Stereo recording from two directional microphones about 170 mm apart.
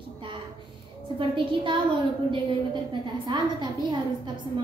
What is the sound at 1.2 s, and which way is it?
Speech, 30° right (ahead or behind).